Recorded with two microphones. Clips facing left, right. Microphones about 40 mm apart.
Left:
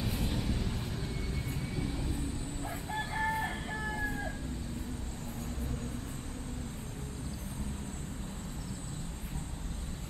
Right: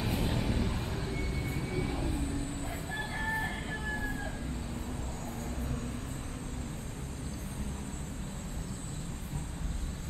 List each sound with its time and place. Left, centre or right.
0.0 s vehicle: right
1.7 s train: centre
3.2 s music: centre